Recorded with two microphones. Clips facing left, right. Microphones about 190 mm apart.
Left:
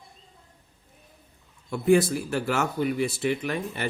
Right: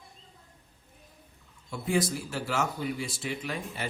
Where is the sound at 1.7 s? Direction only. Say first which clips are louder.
Left 8 dB; 60° left (ahead or behind).